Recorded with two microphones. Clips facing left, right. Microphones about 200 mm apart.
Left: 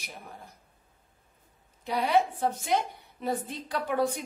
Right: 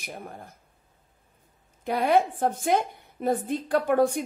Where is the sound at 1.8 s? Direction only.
55° right (ahead or behind).